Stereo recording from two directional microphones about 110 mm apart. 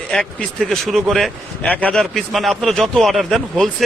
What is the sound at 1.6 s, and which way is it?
Speech, 15° left (ahead or behind).